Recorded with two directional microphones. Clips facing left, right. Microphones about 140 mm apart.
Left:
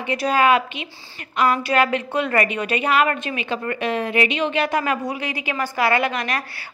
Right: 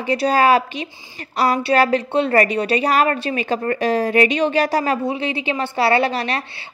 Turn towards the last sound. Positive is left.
turn(degrees=-30)  # may be behind; listen again after turning